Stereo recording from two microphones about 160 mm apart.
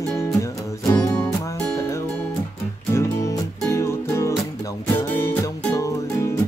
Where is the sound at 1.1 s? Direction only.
10° left (ahead or behind).